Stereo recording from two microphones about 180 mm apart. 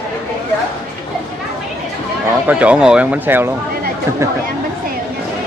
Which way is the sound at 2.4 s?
5° right (ahead or behind).